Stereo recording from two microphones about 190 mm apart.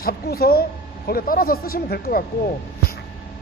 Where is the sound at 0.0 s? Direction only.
50° left (ahead or behind).